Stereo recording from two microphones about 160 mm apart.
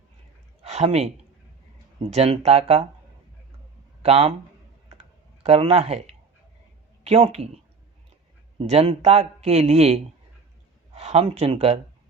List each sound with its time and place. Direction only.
0.6 s a sound: 40° right (ahead or behind)
2.0 s a man's voice: 40° right (ahead or behind)
4.0 s a man's voice: 35° right (ahead or behind)
4.9 s clicking: 40° right (ahead or behind)
7.0 s a man's voice: 40° right (ahead or behind)